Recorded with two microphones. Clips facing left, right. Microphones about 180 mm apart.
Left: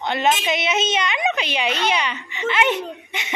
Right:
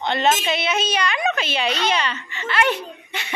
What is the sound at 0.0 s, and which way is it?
A child's voice, 10° left (ahead or behind).